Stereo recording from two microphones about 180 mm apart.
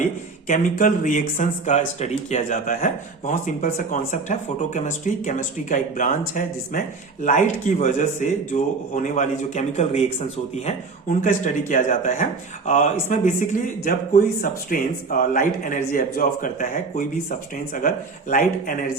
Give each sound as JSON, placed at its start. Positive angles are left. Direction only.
{"t": 0.0, "sound": "speech", "side_deg": 45}